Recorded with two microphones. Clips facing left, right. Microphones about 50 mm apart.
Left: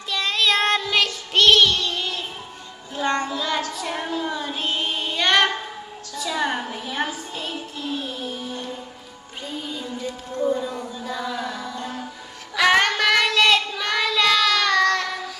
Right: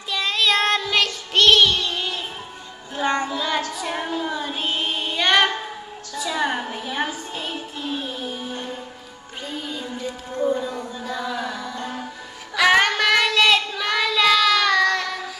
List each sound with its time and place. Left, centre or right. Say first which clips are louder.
0.1 s child singing: even; centre
6.1 s a sound: right 1 dB; centre
7.1 s music: right 1 dB; centre
8.5 s music: right 1 dB; right
10.0 s music: right 1 dB; centre
10.6 s a sound: right 1 dB; centre
11.7 s music: right 1 dB; right
12.5 s child singing: right 1 dB; centre